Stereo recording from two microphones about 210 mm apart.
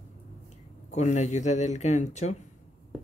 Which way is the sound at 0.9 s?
35° left (ahead or behind).